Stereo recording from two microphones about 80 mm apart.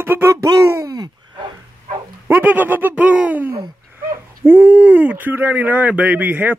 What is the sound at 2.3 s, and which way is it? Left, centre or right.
Speech, right.